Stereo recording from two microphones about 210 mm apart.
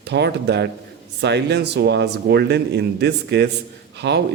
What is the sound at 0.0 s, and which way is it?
A man's voice, 55° right (ahead or behind).